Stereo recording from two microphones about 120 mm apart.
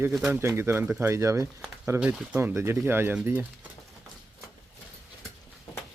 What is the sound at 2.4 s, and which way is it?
Speech, 20° right (ahead or behind).